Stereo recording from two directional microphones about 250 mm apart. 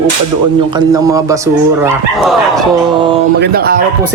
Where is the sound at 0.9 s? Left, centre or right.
Centre.